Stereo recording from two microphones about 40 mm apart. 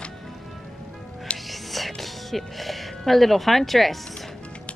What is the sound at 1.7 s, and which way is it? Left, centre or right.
Music, centre.